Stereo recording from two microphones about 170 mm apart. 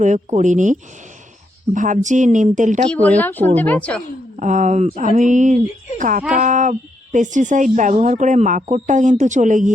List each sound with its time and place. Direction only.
0.0 s speech: 45° right (ahead or behind)
2.9 s a woman's voice: 10° left (ahead or behind)
4.4 s speech: 45° right (ahead or behind)